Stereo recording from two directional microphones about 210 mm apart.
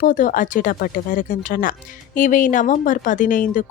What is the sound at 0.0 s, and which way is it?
Speech, 40° left (ahead or behind).